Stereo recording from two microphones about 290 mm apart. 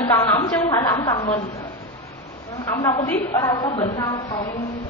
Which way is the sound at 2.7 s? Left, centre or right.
Centre.